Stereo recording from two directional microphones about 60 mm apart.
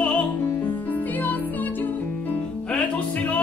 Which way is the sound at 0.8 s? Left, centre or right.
Left.